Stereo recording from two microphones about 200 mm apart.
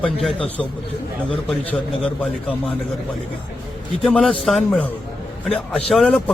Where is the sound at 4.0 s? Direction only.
5° left (ahead or behind).